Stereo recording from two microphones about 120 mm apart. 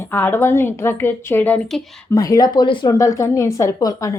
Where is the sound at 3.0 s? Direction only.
25° left (ahead or behind).